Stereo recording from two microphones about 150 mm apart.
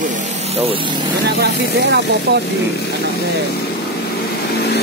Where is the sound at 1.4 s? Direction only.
90° right.